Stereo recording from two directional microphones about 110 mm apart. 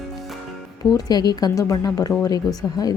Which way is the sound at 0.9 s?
35° left (ahead or behind).